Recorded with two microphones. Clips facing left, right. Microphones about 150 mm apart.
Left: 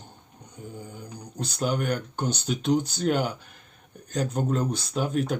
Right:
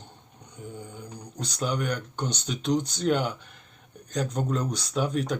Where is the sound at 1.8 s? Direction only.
5° left (ahead or behind).